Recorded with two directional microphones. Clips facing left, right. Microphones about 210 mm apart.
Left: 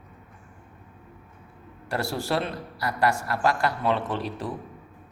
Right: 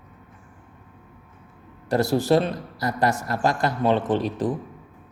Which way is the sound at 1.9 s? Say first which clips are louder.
Right 8 dB; 20° right (ahead or behind).